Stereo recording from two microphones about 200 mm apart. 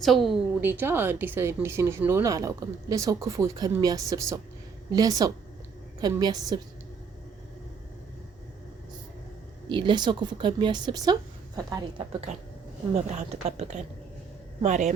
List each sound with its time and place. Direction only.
0.0 s a woman's voice: centre (ahead or behind)
0.6 s speech: 10° right (ahead or behind)
9.6 s speech: 25° right (ahead or behind)
12.9 s a woman's voice: 35° right (ahead or behind)